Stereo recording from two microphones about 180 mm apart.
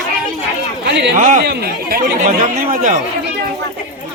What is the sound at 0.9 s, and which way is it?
Speech, 75° right (ahead or behind).